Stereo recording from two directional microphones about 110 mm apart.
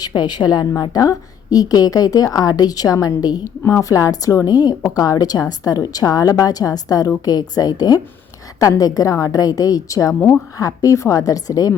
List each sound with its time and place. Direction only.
0.0 s a woman's voice: 40° left (ahead or behind)